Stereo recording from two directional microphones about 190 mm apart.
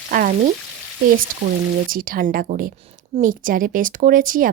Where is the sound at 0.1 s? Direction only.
50° right (ahead or behind).